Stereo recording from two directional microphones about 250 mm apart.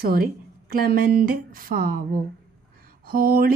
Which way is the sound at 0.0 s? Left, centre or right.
Right.